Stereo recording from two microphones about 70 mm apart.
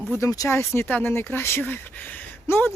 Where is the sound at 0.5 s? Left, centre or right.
Left.